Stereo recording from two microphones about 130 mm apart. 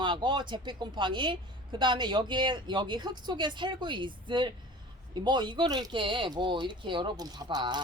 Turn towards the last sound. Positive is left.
turn(degrees=-35)  # may be behind; listen again after turning